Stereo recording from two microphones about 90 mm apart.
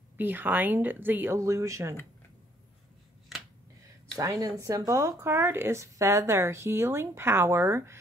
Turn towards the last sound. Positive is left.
turn(degrees=-30)  # may be behind; listen again after turning